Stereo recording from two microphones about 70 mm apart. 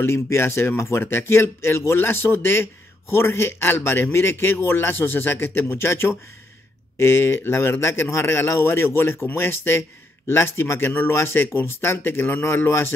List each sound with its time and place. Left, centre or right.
0.0 s a man's voice: left